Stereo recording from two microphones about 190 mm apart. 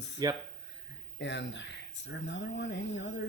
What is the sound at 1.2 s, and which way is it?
Speech, 70° left (ahead or behind).